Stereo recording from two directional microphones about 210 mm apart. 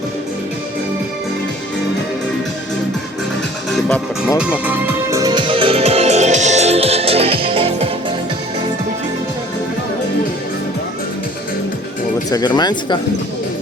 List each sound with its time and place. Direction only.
3.7 s music: 5° left (ahead or behind)
4.6 s music: 10° right (ahead or behind); by 7.9 s 25° right (ahead or behind)
12.3 s speech: 20° left (ahead or behind)